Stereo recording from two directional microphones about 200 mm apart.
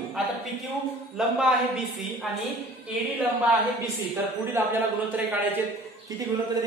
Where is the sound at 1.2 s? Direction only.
5° right (ahead or behind).